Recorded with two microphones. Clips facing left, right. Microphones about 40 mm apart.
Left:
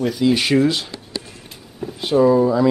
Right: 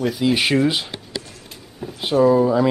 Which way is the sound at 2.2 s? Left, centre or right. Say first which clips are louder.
Even; centre.